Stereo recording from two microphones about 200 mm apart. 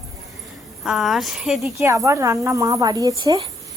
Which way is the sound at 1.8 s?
15° right (ahead or behind).